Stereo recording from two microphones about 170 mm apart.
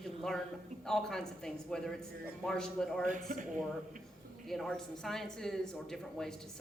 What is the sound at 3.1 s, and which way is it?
Speech, 50° right (ahead or behind).